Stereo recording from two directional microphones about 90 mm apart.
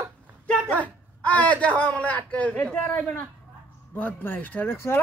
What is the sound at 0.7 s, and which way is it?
A man's voice, 15° left (ahead or behind).